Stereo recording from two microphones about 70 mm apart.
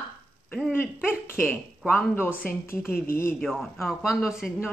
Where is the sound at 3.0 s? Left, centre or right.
Left.